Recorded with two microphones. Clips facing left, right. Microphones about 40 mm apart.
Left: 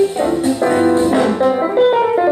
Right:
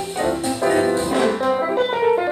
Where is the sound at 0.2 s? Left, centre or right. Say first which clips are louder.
Left 5 dB; centre.